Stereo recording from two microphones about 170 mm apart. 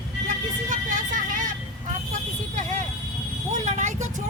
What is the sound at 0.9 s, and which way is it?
Vehicle, 50° right (ahead or behind).